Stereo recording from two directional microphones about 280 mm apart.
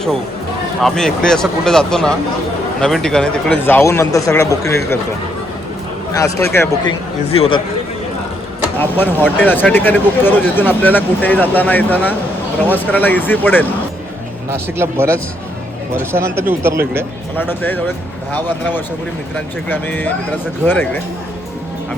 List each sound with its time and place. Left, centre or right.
0.8 s speech: centre
6.1 s speech: centre
7.3 s speech: left
8.8 s speech: centre
14.8 s speech: centre
17.5 s speech: centre